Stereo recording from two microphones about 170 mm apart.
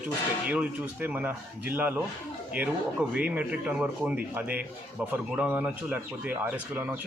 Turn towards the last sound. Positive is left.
turn(degrees=-10)  # may be behind; listen again after turning